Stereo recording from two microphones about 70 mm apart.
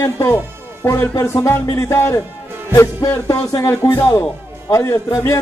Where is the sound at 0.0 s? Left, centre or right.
Left.